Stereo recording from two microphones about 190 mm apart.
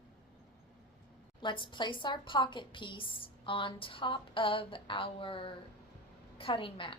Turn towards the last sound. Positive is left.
turn(degrees=25)  # may be behind; listen again after turning